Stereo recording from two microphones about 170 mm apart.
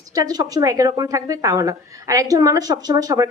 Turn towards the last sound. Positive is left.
turn(degrees=-20)  # may be behind; listen again after turning